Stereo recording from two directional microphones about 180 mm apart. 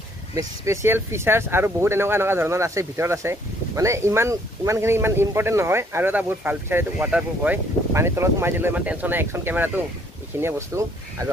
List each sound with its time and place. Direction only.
0.3 s speech: 15° right (ahead or behind)